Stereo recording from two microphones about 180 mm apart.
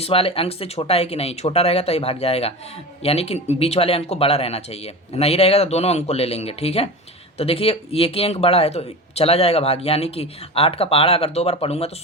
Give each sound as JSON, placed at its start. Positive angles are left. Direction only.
{"t": 0.0, "sound": "speech", "side_deg": 30}